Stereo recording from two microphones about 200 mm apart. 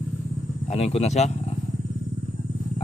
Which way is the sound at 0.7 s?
30° left (ahead or behind).